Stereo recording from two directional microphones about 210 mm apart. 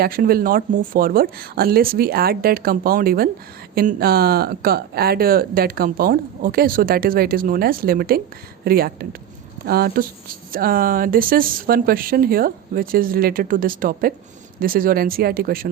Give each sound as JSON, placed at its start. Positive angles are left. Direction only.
{"t": 0.0, "sound": "speech", "side_deg": -45}